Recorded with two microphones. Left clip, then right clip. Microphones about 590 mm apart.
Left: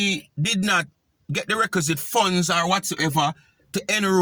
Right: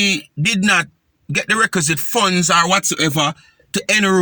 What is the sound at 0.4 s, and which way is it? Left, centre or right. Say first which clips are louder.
Speech: right 6 dB; left.